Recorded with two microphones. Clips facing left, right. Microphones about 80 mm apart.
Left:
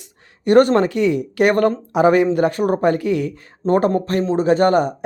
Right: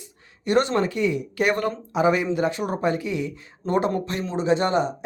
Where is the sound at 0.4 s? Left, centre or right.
Left.